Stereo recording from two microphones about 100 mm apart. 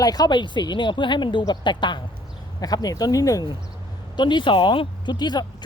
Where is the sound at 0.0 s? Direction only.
40° left (ahead or behind).